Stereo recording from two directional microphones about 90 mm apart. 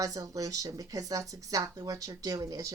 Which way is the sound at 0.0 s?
40° right (ahead or behind).